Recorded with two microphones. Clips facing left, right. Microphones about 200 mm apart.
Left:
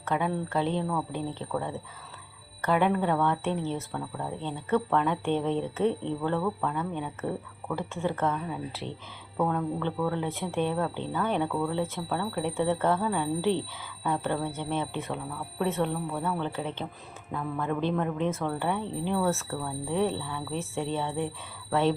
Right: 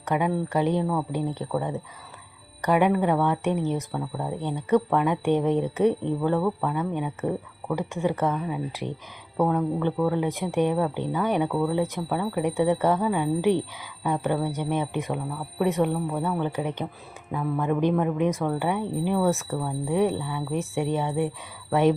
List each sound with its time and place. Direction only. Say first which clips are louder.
0.0 s speech: right 4 dB; 15° right (ahead or behind)